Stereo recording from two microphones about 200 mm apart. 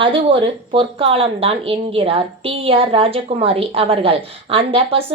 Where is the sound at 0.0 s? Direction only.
25° right (ahead or behind).